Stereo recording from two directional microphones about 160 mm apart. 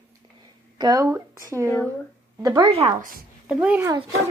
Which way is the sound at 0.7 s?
20° right (ahead or behind).